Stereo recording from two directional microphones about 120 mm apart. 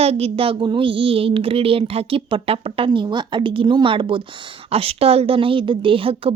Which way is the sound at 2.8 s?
40° right (ahead or behind).